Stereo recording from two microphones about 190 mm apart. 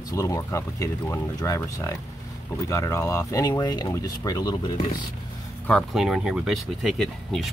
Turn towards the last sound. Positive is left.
turn(degrees=0)  # may be behind; listen again after turning